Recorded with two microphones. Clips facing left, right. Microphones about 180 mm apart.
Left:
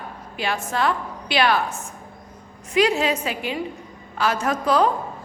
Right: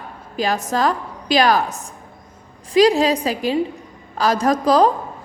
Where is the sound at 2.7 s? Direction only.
35° right (ahead or behind).